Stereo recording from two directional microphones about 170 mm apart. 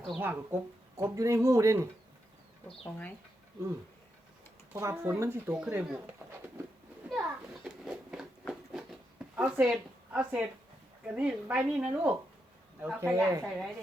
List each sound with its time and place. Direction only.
0.2 s speech: 10° right (ahead or behind)
4.7 s speech: 15° right (ahead or behind)
5.5 s speech: 5° right (ahead or behind)
7.1 s a sound: centre (ahead or behind)
9.6 s a woman's voice: centre (ahead or behind)